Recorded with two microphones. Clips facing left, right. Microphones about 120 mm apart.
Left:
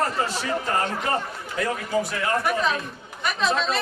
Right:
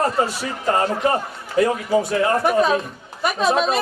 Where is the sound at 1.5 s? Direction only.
30° right (ahead or behind).